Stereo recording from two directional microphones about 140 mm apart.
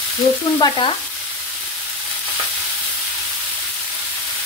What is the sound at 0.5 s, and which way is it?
Stir, 35° left (ahead or behind).